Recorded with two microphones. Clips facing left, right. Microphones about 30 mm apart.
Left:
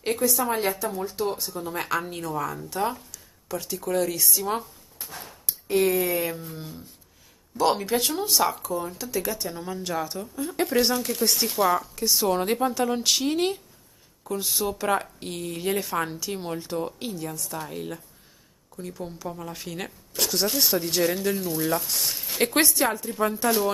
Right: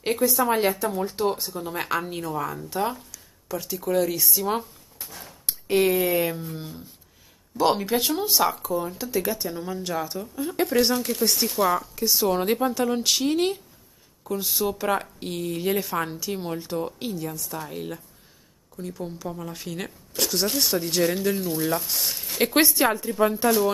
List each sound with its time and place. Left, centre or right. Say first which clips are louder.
0.0 s a woman's voice: right 2 dB; centre
1.4 s speech: right 1 dB; centre
5.7 s speech: right 2 dB; centre